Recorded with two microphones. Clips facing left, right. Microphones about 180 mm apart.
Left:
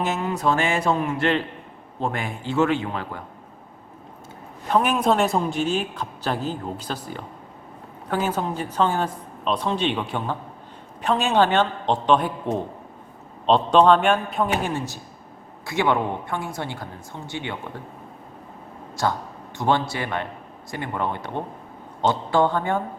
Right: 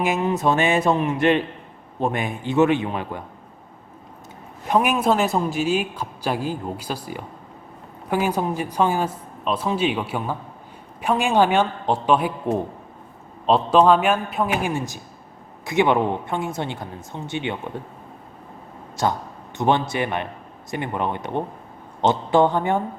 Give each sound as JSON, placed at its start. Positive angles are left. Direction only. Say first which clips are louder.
{"t": 0.0, "sound": "speech", "louder": "right 3 dB", "side_deg": -15}
{"t": 4.7, "sound": "a man's voice", "louder": "right 1 dB", "side_deg": -10}
{"t": 19.5, "sound": "a man's voice", "louder": "right 2 dB", "side_deg": -20}